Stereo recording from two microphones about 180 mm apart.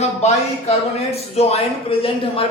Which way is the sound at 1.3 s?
35° left (ahead or behind).